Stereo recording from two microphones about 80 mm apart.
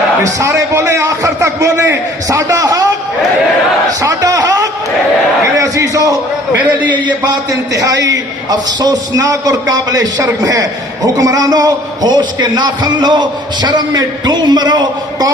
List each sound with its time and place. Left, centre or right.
0.3 s a man's voice: right
4.0 s a man's voice: right
7.7 s a man's voice: right